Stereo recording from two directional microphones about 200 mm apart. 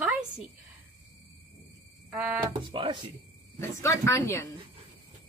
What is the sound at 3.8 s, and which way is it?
Speech, 15° left (ahead or behind).